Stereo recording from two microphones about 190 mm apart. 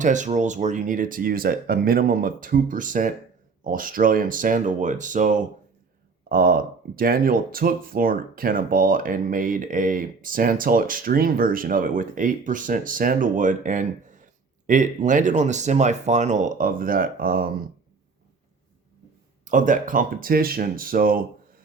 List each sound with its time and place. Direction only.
0.0 s speech: 40° right (ahead or behind)
19.5 s speech: 45° right (ahead or behind)